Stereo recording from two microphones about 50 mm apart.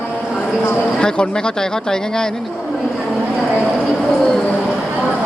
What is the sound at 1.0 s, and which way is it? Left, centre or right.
A man's voice, centre.